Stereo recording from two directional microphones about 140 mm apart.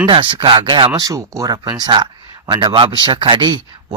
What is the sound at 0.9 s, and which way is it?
Speech, 25° right (ahead or behind).